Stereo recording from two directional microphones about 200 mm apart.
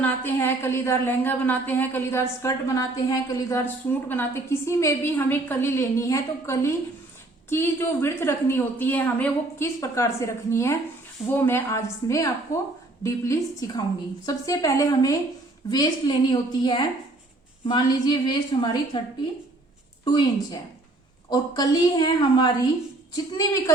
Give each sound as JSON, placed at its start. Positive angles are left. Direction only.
{"t": 0.0, "sound": "a woman's voice", "side_deg": 10}
{"t": 20.1, "sound": "a woman's voice", "side_deg": 20}